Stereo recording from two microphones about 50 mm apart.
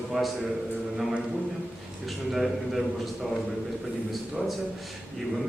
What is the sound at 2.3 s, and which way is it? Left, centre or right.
Speech, centre.